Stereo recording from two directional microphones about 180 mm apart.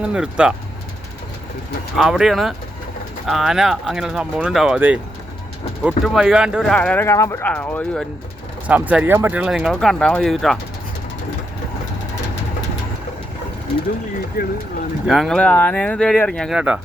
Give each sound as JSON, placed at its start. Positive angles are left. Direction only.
{"t": 0.0, "sound": "speech", "side_deg": -5}
{"t": 2.0, "sound": "speech", "side_deg": 0}
{"t": 8.6, "sound": "speech", "side_deg": -10}
{"t": 14.4, "sound": "speech", "side_deg": 55}
{"t": 15.0, "sound": "speech", "side_deg": 0}